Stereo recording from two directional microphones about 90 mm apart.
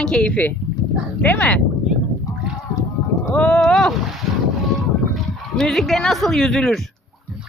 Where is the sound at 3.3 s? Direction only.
10° left (ahead or behind).